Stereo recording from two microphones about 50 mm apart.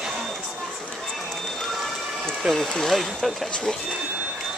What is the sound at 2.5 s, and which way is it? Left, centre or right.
Speech, centre.